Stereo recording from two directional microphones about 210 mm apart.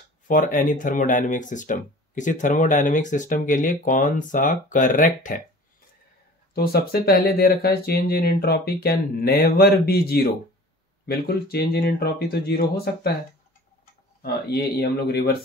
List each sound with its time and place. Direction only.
0.3 s speech: 40° left (ahead or behind)
6.5 s speech: 50° left (ahead or behind)
14.2 s speech: 50° left (ahead or behind)